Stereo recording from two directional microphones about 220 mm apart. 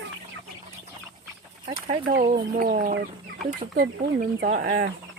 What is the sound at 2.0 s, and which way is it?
Speech, 40° right (ahead or behind).